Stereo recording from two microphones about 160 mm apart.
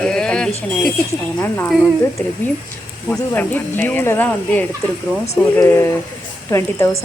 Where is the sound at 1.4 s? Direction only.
15° left (ahead or behind).